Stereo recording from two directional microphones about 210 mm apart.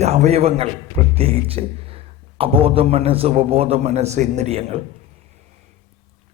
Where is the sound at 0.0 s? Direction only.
30° right (ahead or behind).